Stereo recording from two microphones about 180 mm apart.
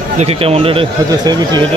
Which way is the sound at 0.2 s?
35° right (ahead or behind).